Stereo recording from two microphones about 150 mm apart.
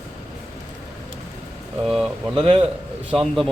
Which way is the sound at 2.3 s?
35° right (ahead or behind).